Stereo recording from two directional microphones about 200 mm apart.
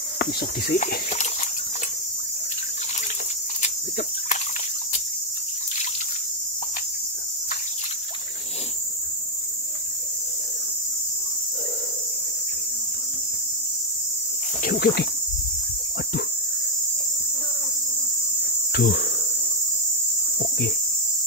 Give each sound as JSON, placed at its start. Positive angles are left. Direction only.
{"t": 0.2, "sound": "speech", "side_deg": 50}
{"t": 14.6, "sound": "a sound", "side_deg": 50}
{"t": 18.7, "sound": "cricket", "side_deg": 55}